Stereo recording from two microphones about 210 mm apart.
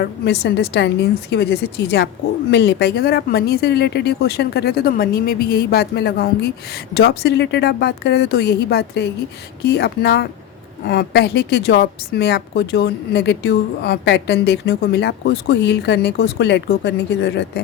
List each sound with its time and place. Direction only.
0.0 s a woman's voice: 50° left (ahead or behind)